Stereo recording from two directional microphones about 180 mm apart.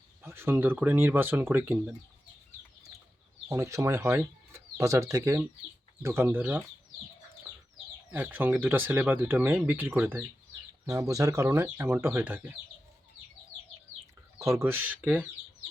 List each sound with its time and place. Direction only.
0.2 s speech: 15° right (ahead or behind)
3.5 s speech: 15° right (ahead or behind)
8.1 s speech: 10° right (ahead or behind)
14.3 s speech: 15° right (ahead or behind)